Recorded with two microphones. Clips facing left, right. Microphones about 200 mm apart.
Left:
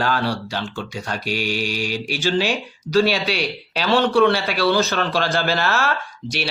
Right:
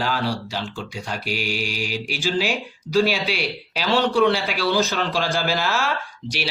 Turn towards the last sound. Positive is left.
turn(degrees=-10)  # may be behind; listen again after turning